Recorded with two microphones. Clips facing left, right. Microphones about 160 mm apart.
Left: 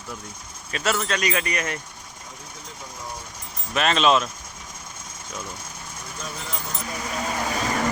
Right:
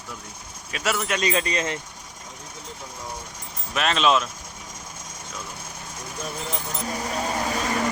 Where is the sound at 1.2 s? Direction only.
25° right (ahead or behind).